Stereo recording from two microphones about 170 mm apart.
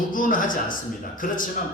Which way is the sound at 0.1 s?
50° left (ahead or behind).